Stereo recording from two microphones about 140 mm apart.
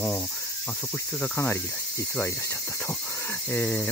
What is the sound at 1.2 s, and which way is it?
Speech, 15° left (ahead or behind).